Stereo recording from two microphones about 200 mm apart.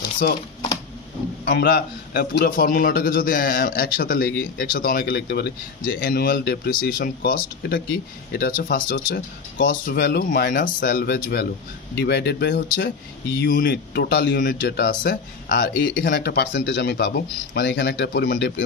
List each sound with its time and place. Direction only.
1.4 s a man's voice: 60° left (ahead or behind)
13.4 s a man's voice: 45° left (ahead or behind)